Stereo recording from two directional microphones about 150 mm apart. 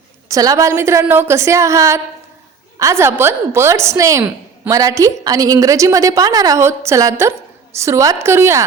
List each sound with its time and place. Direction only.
0.3 s a woman's voice: 20° right (ahead or behind)